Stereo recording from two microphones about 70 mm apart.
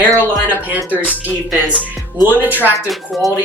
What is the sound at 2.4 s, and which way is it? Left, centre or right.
Speech, right.